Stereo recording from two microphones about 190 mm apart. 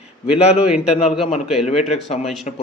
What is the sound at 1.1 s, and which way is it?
Speech, centre (ahead or behind).